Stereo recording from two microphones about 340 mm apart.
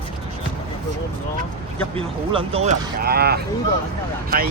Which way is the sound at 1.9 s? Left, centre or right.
Centre.